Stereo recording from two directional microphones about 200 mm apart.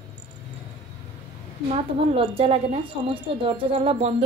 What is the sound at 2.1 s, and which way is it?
A woman's voice, 30° right (ahead or behind).